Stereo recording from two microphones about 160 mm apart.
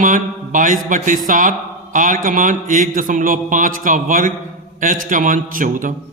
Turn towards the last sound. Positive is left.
turn(degrees=-55)  # may be behind; listen again after turning